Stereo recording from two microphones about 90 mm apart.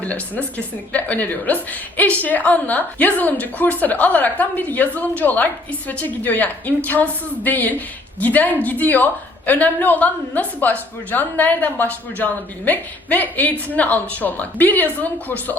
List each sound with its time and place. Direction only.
0.0 s a woman's voice: 15° left (ahead or behind)